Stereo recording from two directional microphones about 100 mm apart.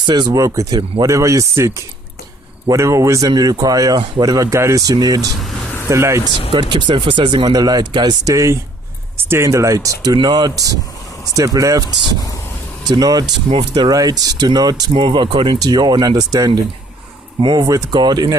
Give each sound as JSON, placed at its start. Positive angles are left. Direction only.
{"t": 0.0, "sound": "speech", "side_deg": -45}
{"t": 5.9, "sound": "speech", "side_deg": -30}
{"t": 6.5, "sound": "speech", "side_deg": -50}
{"t": 13.0, "sound": "speech", "side_deg": -40}
{"t": 15.6, "sound": "speech", "side_deg": -40}
{"t": 17.4, "sound": "speech", "side_deg": -50}